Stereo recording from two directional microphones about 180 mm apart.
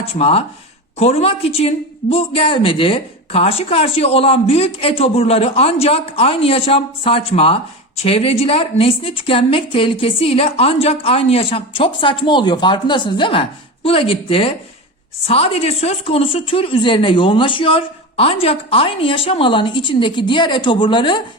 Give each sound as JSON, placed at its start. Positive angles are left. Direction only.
{"t": 0.0, "sound": "a woman's voice", "side_deg": 35}